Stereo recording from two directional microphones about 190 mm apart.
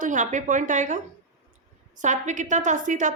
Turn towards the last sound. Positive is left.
turn(degrees=-40)  # may be behind; listen again after turning